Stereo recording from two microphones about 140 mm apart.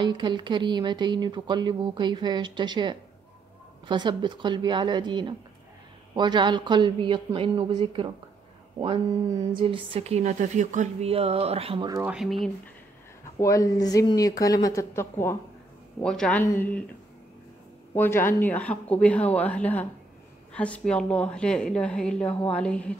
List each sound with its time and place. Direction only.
0.0 s speech: 35° right (ahead or behind); by 11.1 s 60° right (ahead or behind)
11.1 s speech: 45° right (ahead or behind)
12.1 s speech: centre (ahead or behind)
13.4 s speech: 25° left (ahead or behind)
16.0 s a woman's voice: 5° left (ahead or behind)
17.9 s a woman's voice: 15° left (ahead or behind)